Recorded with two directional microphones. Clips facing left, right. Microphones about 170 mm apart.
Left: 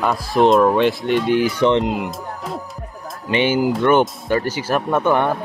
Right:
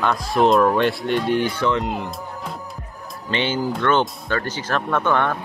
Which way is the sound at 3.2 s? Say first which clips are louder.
Left 5 dB; 10° left (ahead or behind).